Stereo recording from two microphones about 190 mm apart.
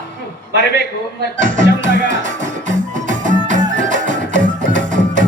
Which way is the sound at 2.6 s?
40° right (ahead or behind).